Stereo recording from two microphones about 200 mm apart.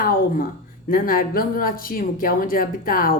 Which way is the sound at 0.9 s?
45° left (ahead or behind).